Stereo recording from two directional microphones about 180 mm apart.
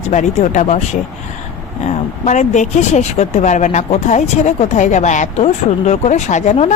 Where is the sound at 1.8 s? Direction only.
40° left (ahead or behind).